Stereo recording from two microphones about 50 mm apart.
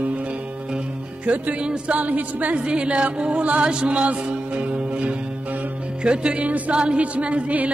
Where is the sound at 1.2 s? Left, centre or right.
Right.